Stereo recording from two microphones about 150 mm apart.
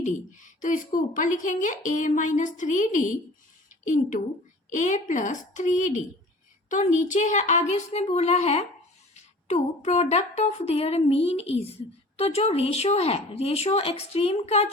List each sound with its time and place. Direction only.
0.0 s a woman's voice: 55° left (ahead or behind)